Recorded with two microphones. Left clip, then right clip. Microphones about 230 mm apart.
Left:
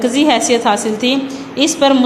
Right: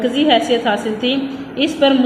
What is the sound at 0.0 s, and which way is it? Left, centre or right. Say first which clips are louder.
A woman's voice: left 1 dB; left.